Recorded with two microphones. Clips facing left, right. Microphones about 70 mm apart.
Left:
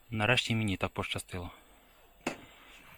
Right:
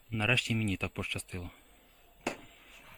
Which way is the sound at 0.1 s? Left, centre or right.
Left.